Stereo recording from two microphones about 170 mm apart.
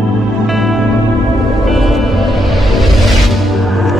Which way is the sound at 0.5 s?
Centre (ahead or behind).